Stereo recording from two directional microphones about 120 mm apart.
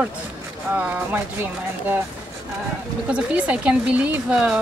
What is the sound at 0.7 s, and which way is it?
Speech, 15° right (ahead or behind).